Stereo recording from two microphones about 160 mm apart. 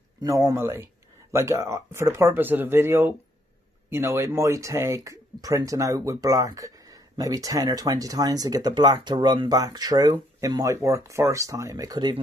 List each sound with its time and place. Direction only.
0.2 s speech: 20° right (ahead or behind)